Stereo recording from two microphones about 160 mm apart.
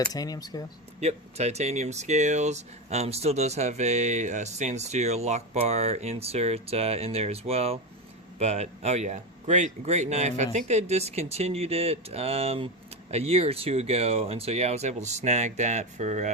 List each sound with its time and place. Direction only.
0.0 s speech: 25° left (ahead or behind)
1.0 s speech: 45° right (ahead or behind)